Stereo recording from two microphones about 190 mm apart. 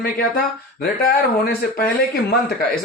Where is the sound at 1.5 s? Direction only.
50° left (ahead or behind).